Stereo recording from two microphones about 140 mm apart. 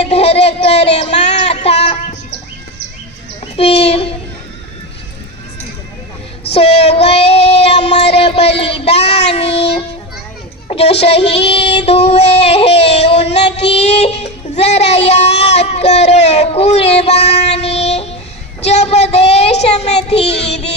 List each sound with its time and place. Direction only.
0.0 s a sound: 45° left (ahead or behind)
3.4 s a child's voice: 45° left (ahead or behind)
6.5 s child singing: 45° left (ahead or behind)
18.6 s speech: 50° left (ahead or behind)